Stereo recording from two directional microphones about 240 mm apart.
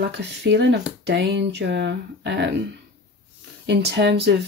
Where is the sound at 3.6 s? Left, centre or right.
Right.